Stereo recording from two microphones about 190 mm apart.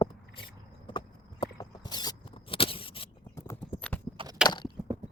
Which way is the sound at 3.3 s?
10° left (ahead or behind).